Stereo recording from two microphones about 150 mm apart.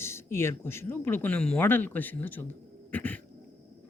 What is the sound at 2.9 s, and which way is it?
Cat, 10° left (ahead or behind).